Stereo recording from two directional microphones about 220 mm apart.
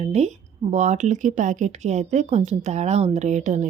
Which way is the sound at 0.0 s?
30° right (ahead or behind).